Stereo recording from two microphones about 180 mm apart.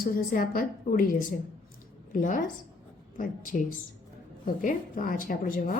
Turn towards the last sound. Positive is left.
turn(degrees=50)  # may be behind; listen again after turning